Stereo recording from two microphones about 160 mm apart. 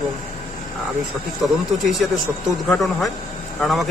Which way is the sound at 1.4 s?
Centre (ahead or behind).